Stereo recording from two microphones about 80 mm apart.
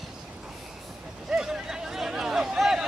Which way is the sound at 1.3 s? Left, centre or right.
Centre.